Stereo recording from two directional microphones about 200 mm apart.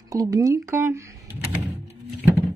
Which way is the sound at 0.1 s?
15° right (ahead or behind).